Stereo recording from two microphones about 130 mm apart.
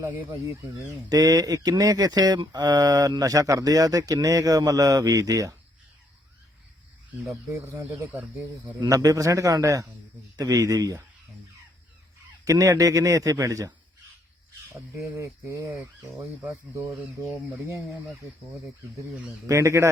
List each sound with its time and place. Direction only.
0.0 s speech: 20° right (ahead or behind)
7.3 s speech: 20° right (ahead or behind)
8.8 s speech: 30° right (ahead or behind)
12.5 s speech: 25° right (ahead or behind)
15.1 s speech: 20° right (ahead or behind)
19.5 s speech: 25° right (ahead or behind)